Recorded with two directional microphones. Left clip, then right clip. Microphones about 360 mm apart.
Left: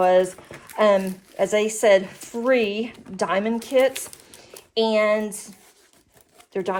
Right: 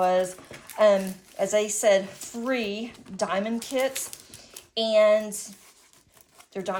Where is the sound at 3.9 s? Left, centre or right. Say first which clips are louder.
Left 1 dB; centre.